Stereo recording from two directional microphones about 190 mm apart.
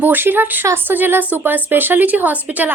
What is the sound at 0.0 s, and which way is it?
Speech, 10° right (ahead or behind).